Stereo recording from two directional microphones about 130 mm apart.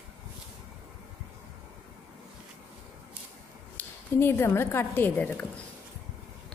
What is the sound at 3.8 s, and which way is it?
Speech, 15° left (ahead or behind).